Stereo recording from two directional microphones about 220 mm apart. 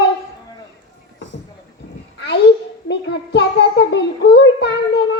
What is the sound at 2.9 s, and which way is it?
A child's voice, 50° left (ahead or behind).